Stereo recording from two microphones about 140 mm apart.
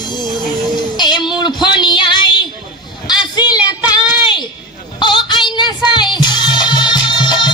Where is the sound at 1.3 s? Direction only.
30° left (ahead or behind).